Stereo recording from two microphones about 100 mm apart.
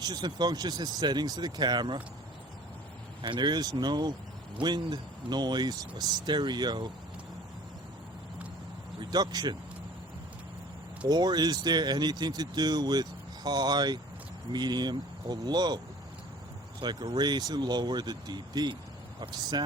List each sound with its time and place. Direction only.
0.0 s speech: 45° right (ahead or behind)
3.2 s speech: 50° right (ahead or behind)
9.0 s speech: 45° right (ahead or behind)
11.1 s speech: 45° right (ahead or behind)
16.8 s speech: 45° right (ahead or behind)